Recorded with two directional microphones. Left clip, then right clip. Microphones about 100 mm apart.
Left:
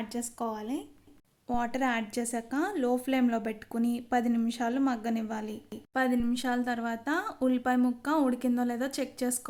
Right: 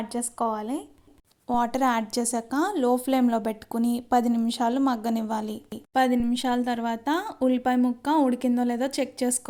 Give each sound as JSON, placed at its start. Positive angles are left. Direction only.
{"t": 0.1, "sound": "a woman's voice", "side_deg": -30}